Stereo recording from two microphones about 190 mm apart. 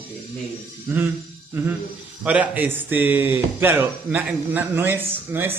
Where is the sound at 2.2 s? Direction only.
10° right (ahead or behind).